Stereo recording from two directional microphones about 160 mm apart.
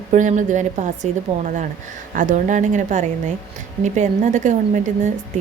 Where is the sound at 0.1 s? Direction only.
50° right (ahead or behind).